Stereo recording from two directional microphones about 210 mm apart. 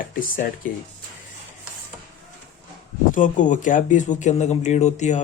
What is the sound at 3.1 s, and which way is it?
Speech, 40° left (ahead or behind).